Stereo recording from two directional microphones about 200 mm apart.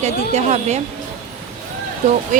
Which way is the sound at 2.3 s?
40° right (ahead or behind).